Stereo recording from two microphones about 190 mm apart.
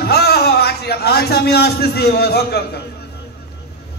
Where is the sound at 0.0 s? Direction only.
55° left (ahead or behind).